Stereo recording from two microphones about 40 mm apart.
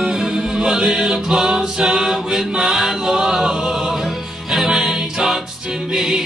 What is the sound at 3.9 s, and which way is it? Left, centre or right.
Music, centre.